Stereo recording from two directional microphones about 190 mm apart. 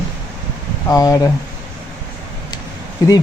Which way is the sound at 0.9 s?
20° left (ahead or behind).